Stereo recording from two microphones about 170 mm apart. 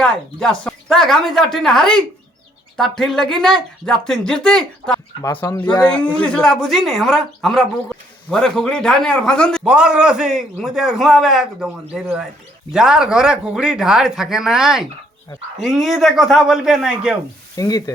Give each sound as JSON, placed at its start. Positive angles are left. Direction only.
{"t": 0.0, "sound": "speech", "side_deg": 5}
{"t": 5.4, "sound": "speech", "side_deg": 20}
{"t": 5.9, "sound": "speech", "side_deg": 5}
{"t": 12.7, "sound": "speech", "side_deg": -5}
{"t": 17.6, "sound": "speech", "side_deg": 20}